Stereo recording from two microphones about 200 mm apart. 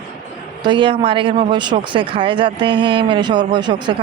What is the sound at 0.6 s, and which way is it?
Speech, 25° right (ahead or behind).